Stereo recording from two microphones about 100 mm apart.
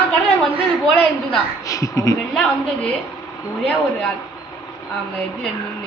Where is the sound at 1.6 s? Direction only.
35° left (ahead or behind).